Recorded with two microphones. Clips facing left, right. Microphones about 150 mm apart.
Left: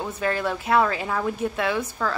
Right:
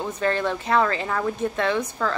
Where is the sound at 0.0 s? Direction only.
5° left (ahead or behind).